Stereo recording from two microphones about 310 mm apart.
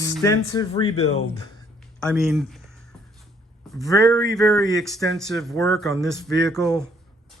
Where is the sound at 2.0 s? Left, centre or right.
Centre.